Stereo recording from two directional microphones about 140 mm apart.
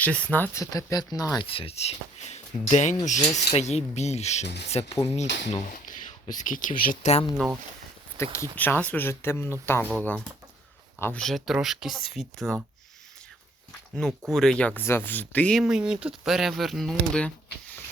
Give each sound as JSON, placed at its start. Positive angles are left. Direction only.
{"t": 0.0, "sound": "speech", "side_deg": 10}
{"t": 0.6, "sound": "speech", "side_deg": 25}
{"t": 1.5, "sound": "speech", "side_deg": 40}
{"t": 3.2, "sound": "speech", "side_deg": 25}
{"t": 3.5, "sound": "speech", "side_deg": 50}
{"t": 5.7, "sound": "speech", "side_deg": 70}
{"t": 7.3, "sound": "speech", "side_deg": 0}
{"t": 8.2, "sound": "speech", "side_deg": 20}
{"t": 14.3, "sound": "speech", "side_deg": 0}
{"t": 15.6, "sound": "speech", "side_deg": -5}